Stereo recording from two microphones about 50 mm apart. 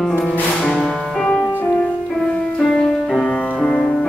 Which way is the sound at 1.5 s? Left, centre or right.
Left.